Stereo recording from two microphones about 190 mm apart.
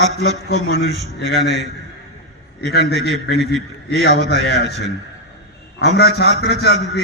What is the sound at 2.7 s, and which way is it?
A man's voice, 60° left (ahead or behind).